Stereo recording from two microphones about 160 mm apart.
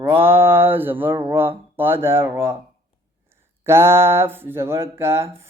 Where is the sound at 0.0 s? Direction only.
15° right (ahead or behind).